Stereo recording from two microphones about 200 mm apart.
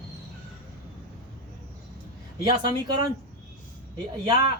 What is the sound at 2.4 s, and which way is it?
Speech, 20° right (ahead or behind).